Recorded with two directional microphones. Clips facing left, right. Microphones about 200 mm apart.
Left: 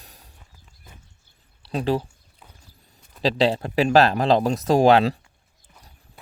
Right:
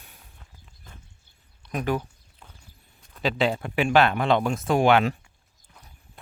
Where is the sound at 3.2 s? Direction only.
35° left (ahead or behind).